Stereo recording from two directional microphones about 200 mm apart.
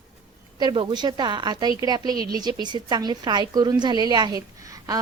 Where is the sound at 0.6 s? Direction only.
20° right (ahead or behind).